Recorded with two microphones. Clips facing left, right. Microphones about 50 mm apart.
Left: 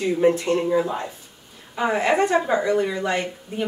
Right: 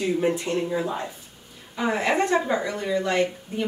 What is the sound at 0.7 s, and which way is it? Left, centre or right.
Speech, centre.